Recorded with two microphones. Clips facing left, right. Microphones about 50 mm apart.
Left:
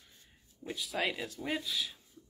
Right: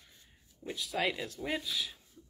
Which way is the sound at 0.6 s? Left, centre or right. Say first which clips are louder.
Right 1 dB; centre.